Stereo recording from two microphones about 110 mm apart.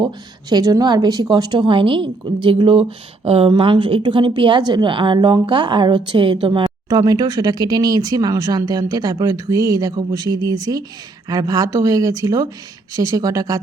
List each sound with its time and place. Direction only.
0.5 s a woman's voice: 35° right (ahead or behind)